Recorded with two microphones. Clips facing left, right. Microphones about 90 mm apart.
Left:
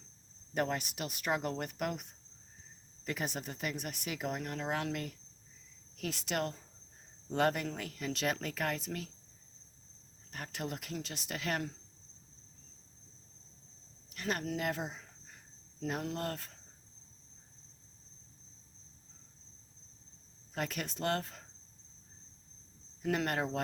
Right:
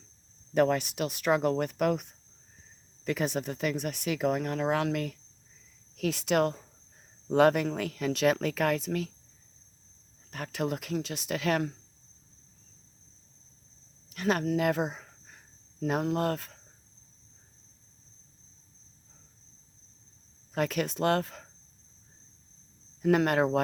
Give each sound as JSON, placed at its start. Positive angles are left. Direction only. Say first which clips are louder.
{"t": 0.5, "sound": "speech", "louder": "right 9 dB", "side_deg": -90}
{"t": 6.0, "sound": "speech", "louder": "right 10 dB", "side_deg": -70}
{"t": 7.8, "sound": "speech", "louder": "right 9 dB", "side_deg": -90}
{"t": 10.3, "sound": "speech", "louder": "right 8 dB", "side_deg": -80}
{"t": 14.2, "sound": "speech", "louder": "right 9 dB", "side_deg": -60}
{"t": 15.9, "sound": "cricket", "louder": "right 9 dB", "side_deg": -60}
{"t": 20.5, "sound": "speech", "louder": "right 9 dB", "side_deg": -75}
{"t": 23.1, "sound": "cricket", "louder": "right 9 dB", "side_deg": -65}